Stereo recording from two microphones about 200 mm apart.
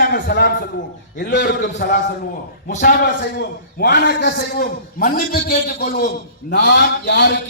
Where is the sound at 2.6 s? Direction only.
40° left (ahead or behind).